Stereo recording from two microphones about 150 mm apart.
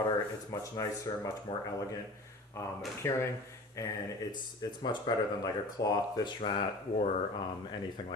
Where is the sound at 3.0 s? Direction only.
20° left (ahead or behind).